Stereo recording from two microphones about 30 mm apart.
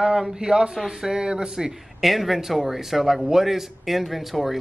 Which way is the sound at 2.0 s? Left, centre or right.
Centre.